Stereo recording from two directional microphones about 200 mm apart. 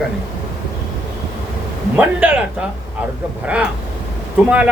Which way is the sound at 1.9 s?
10° right (ahead or behind).